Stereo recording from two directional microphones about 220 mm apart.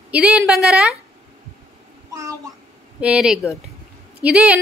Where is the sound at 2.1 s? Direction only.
15° right (ahead or behind).